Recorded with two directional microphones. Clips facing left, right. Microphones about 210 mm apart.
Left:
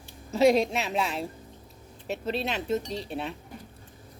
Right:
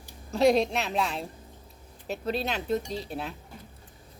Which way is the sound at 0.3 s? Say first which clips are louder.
Left 1 dB; centre (ahead or behind).